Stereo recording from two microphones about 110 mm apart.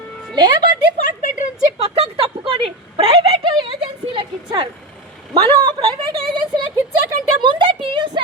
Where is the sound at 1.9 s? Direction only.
60° right (ahead or behind).